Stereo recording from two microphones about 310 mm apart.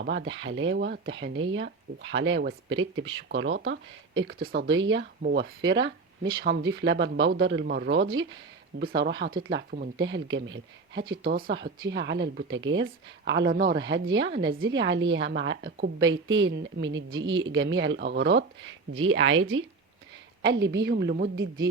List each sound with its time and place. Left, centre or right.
0.0 s speech: right
20.5 s speech: right